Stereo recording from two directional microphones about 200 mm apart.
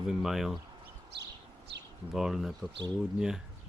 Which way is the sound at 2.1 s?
Centre (ahead or behind).